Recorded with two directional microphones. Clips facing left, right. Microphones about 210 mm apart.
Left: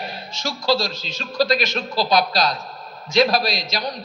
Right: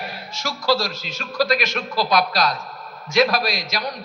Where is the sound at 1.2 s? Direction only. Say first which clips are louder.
Left 1 dB; 35° left (ahead or behind).